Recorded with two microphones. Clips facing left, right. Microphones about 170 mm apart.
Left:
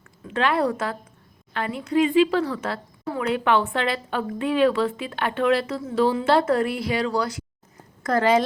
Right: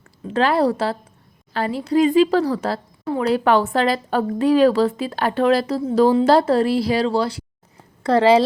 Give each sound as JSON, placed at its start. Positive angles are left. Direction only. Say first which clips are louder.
{"t": 0.3, "sound": "a woman's voice", "louder": "right 5 dB", "side_deg": -35}